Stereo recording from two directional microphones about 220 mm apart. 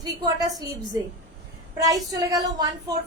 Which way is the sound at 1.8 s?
15° right (ahead or behind).